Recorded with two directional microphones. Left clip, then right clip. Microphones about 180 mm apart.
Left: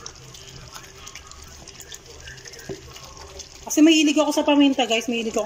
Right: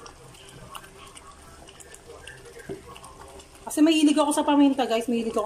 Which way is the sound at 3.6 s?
5° left (ahead or behind).